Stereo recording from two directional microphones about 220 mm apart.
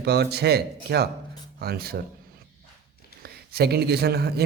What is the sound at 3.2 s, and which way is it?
Speech, 45° right (ahead or behind).